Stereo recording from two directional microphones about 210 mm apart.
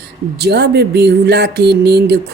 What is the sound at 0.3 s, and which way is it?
Speech, 50° right (ahead or behind).